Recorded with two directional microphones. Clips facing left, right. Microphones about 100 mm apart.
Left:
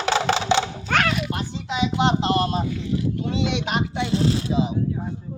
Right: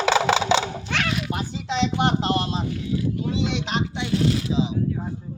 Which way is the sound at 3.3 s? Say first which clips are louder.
Left 3 dB; 65° left (ahead or behind).